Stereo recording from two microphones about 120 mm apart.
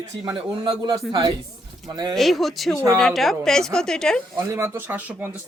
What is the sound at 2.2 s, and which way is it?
Speech, centre (ahead or behind).